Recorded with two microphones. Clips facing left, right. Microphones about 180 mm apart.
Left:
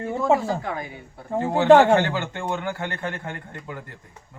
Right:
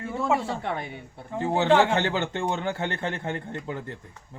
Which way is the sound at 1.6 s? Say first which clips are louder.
Left 7 dB; 50° left (ahead or behind).